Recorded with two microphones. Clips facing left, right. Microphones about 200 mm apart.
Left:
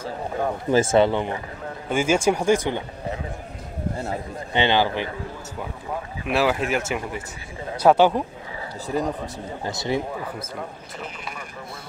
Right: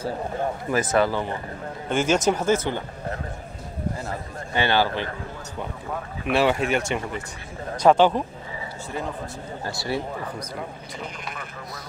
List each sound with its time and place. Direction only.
0.7 s speech: 25° left (ahead or behind)
1.9 s a man's voice: 10° left (ahead or behind)
4.1 s a man's voice: 15° left (ahead or behind)
6.2 s a man's voice: centre (ahead or behind)
8.8 s speech: 40° left (ahead or behind)
9.6 s speech: 20° left (ahead or behind)
10.4 s speech: 5° left (ahead or behind)